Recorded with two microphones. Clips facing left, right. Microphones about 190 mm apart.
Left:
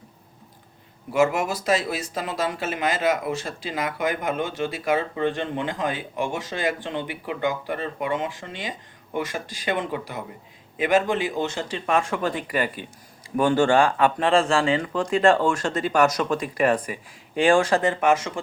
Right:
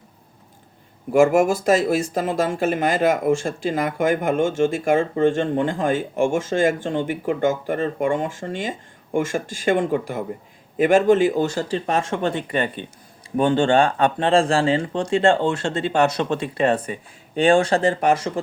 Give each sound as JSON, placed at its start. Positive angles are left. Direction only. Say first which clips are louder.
{"t": 1.1, "sound": "speech", "louder": "right 6 dB", "side_deg": -50}